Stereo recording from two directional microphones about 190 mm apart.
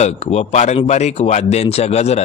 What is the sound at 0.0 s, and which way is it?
Speech, 35° left (ahead or behind).